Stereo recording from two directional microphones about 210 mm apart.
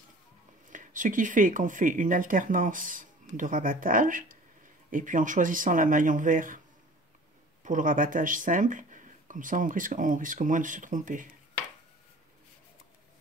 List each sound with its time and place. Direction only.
0.7 s speech: 40° right (ahead or behind)
7.6 s speech: 40° right (ahead or behind)